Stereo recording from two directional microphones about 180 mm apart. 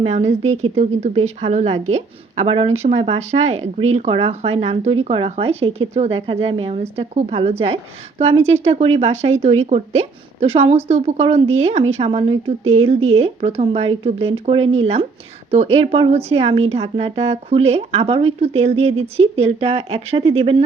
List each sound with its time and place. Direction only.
0.0 s a woman's voice: 35° right (ahead or behind)